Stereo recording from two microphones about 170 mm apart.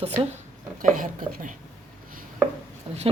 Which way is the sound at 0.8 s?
50° right (ahead or behind).